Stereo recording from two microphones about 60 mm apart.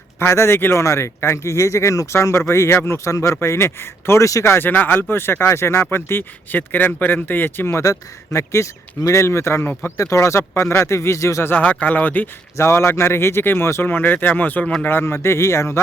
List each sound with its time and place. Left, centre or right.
0.2 s speech: left
3.1 s speech: left
3.4 s speech: left
7.8 s speech: left
10.5 s speech: left
11.5 s speech: left
12.5 s speech: left
14.6 s speech: centre
14.8 s speech: left